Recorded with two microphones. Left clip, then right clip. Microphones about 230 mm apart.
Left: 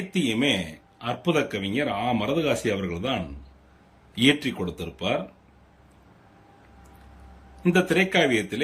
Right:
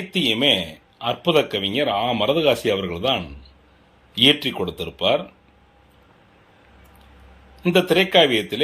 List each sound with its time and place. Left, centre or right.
0.1 s a man's voice: centre
7.6 s a man's voice: centre